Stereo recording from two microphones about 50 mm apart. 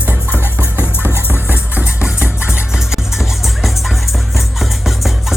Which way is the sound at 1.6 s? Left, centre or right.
Right.